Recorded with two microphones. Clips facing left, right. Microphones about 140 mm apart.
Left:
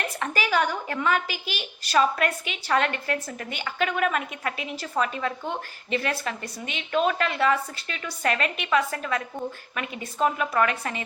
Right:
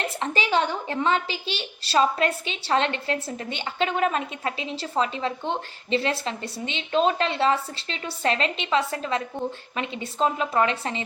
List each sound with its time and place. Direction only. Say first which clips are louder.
0.0 s a woman's voice: right 1 dB; 25° right (ahead or behind)